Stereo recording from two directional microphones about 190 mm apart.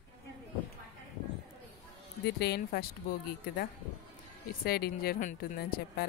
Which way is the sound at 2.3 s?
60° left (ahead or behind).